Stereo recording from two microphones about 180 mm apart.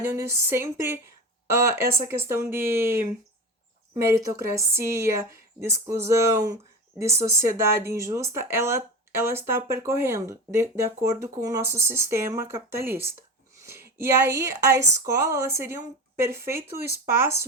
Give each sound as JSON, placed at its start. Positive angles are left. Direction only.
{"t": 0.0, "sound": "speech", "side_deg": -15}